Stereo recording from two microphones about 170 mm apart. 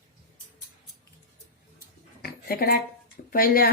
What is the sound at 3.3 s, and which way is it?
Speech, 60° left (ahead or behind).